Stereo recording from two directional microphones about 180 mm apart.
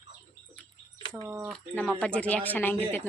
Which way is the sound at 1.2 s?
15° right (ahead or behind).